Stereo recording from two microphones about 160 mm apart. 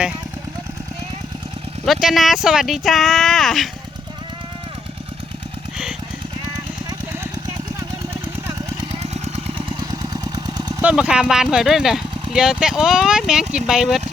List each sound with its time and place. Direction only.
1.8 s speech: centre (ahead or behind)
8.9 s a sound: 45° right (ahead or behind)
9.9 s jackhammer: 25° right (ahead or behind)
10.8 s speech: 5° right (ahead or behind)